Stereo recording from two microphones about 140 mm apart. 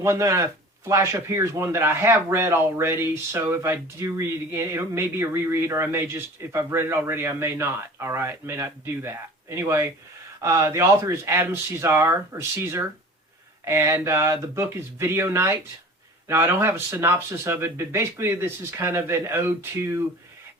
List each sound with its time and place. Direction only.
0.0 s speech: 20° right (ahead or behind)